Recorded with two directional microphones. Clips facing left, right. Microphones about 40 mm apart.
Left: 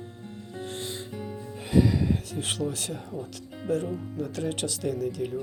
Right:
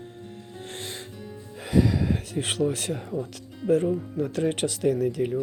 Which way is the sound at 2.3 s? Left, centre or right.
Right.